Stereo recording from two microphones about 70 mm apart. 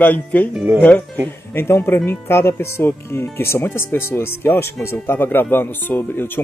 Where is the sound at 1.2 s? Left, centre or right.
Left.